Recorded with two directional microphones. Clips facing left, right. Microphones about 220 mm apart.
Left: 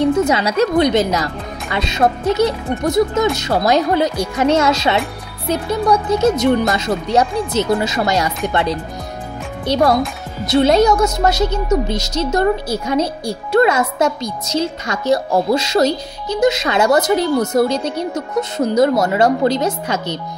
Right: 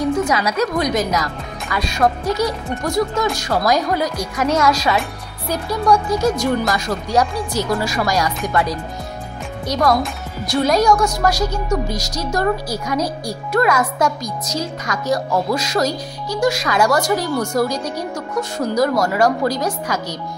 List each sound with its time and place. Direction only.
0.0 s a woman's voice: 25° left (ahead or behind)